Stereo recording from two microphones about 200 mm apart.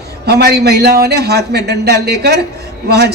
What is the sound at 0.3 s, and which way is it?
A man's voice, 55° right (ahead or behind).